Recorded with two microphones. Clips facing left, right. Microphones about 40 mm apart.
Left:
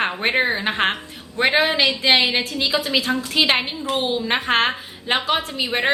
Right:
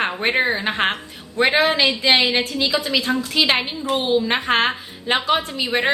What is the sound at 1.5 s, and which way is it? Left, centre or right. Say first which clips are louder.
Speech: even; centre.